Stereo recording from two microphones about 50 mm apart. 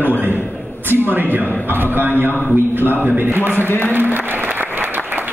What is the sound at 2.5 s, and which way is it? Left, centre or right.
Speech, right.